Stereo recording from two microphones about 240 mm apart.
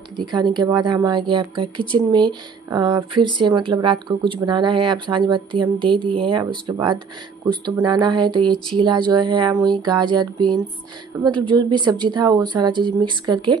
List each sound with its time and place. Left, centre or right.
0.3 s speech: centre
8.4 s speech: centre
8.7 s speech: centre